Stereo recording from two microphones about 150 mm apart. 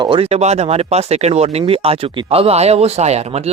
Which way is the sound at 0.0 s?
35° right (ahead or behind).